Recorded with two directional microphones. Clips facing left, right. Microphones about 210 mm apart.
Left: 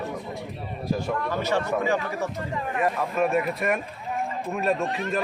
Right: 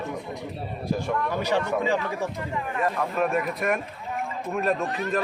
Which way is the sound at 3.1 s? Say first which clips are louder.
Left 1 dB; centre (ahead or behind).